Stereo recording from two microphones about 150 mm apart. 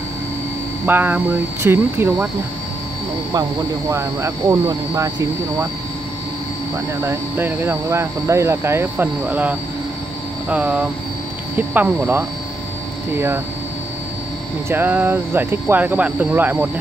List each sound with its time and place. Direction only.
0.8 s speech: 15° right (ahead or behind)
3.9 s speech: 20° right (ahead or behind)
7.0 s speech: 15° right (ahead or behind)
14.7 s speech: 15° right (ahead or behind)